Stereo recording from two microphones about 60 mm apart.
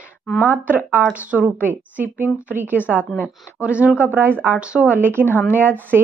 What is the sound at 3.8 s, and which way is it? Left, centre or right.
Speech, right.